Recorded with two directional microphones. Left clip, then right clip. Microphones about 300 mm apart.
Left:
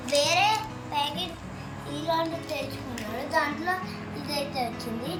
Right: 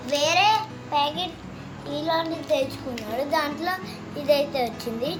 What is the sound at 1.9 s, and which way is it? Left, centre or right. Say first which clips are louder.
Speech: right 3 dB; centre.